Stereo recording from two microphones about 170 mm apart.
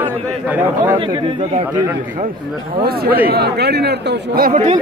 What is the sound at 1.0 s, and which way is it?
Speech, 30° right (ahead or behind).